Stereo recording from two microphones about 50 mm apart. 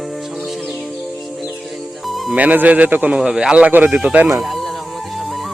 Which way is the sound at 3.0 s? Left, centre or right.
Right.